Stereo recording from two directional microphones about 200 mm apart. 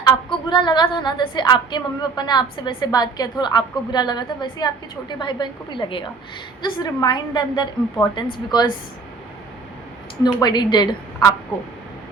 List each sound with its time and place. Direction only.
0.0 s a woman's voice: 25° left (ahead or behind)
10.4 s a woman's voice: 20° left (ahead or behind)